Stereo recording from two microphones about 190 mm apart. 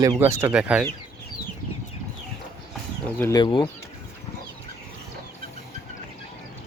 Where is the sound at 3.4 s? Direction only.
25° left (ahead or behind).